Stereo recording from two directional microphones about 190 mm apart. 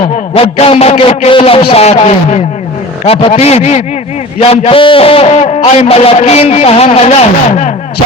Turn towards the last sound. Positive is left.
turn(degrees=40)  # may be behind; listen again after turning